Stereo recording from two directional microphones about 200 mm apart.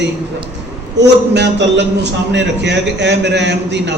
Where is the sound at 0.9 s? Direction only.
60° right (ahead or behind).